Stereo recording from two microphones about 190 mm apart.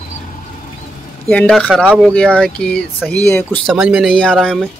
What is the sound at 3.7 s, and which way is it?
Speech, 5° right (ahead or behind).